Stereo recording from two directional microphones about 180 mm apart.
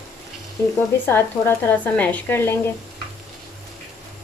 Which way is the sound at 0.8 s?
10° left (ahead or behind).